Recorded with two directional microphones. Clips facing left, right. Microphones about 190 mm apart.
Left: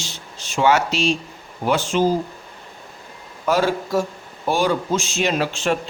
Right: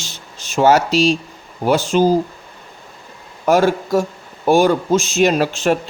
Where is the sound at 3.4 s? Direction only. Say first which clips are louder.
Right 5 dB; 50° right (ahead or behind).